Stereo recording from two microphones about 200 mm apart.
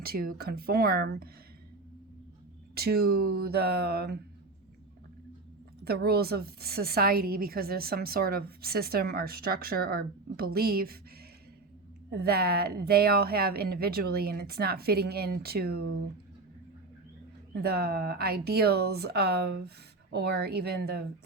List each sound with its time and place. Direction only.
0.0 s a woman's voice: 50° right (ahead or behind)
2.7 s a woman's voice: 50° right (ahead or behind)
5.8 s a woman's voice: 50° right (ahead or behind)
12.1 s a woman's voice: 50° right (ahead or behind)
17.5 s a woman's voice: 50° right (ahead or behind)